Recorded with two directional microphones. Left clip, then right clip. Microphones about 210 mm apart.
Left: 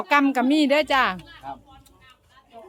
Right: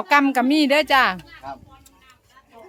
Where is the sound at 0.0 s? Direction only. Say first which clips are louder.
Right 3 dB; 5° right (ahead or behind).